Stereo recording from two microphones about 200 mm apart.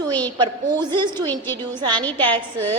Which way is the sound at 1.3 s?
10° left (ahead or behind).